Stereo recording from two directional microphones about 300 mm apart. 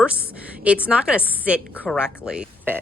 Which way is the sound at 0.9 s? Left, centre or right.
Centre.